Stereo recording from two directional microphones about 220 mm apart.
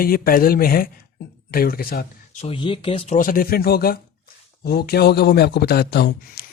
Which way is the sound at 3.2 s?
40° left (ahead or behind).